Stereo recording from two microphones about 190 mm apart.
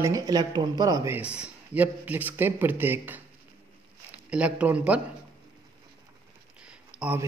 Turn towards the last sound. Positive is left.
turn(degrees=-5)  # may be behind; listen again after turning